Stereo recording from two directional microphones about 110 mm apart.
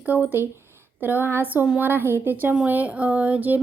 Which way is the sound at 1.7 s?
15° right (ahead or behind).